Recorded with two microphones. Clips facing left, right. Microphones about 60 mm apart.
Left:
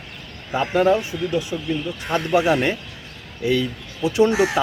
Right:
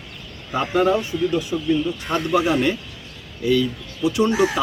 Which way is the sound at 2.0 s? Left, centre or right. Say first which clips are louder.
Left 3 dB; left.